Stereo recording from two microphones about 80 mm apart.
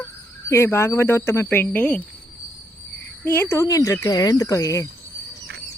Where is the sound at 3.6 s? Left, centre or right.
Left.